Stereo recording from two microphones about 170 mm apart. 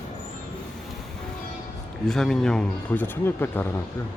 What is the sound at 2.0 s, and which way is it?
Speech, 5° left (ahead or behind).